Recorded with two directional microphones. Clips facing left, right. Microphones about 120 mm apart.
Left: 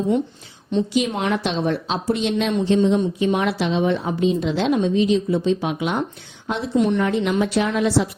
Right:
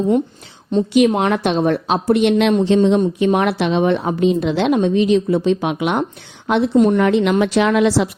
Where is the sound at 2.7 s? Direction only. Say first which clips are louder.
Right 4 dB; 80° right.